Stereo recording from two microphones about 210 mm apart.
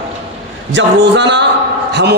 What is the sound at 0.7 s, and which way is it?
Speech, 55° right (ahead or behind).